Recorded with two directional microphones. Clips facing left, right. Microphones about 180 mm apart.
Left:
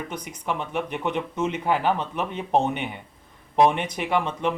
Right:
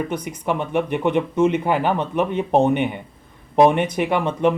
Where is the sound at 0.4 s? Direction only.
55° right (ahead or behind).